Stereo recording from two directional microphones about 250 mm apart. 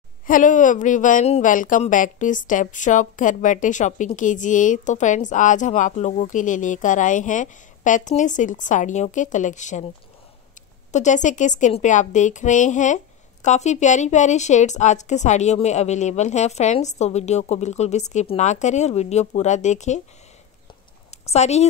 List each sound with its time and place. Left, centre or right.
0.3 s a woman's voice: left
10.9 s a woman's voice: left
21.3 s a woman's voice: left